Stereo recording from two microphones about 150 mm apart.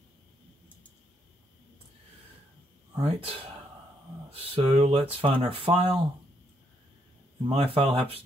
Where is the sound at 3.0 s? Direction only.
40° right (ahead or behind).